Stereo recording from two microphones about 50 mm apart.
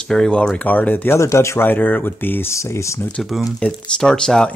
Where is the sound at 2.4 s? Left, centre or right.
Left.